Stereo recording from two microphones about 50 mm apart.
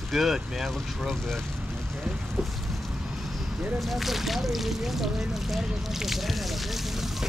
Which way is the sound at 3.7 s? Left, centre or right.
Centre.